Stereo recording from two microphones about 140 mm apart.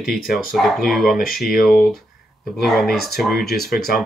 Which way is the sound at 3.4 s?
90° left.